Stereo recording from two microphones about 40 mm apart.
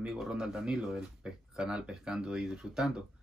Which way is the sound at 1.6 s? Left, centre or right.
Right.